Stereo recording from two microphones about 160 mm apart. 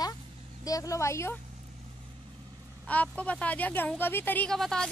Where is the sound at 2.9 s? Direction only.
10° left (ahead or behind).